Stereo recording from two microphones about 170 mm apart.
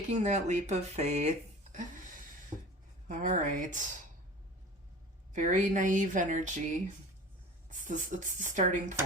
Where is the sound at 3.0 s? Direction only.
50° right (ahead or behind).